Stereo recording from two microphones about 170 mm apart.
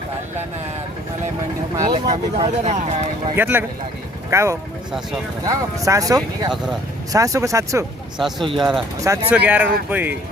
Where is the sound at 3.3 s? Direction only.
10° right (ahead or behind).